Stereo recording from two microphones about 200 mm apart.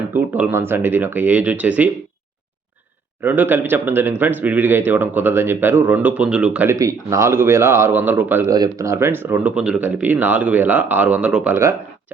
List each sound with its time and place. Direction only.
0.1 s speech: 10° right (ahead or behind)
3.2 s speech: 10° right (ahead or behind)